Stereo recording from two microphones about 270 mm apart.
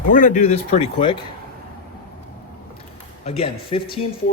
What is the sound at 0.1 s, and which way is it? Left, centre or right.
Speech, left.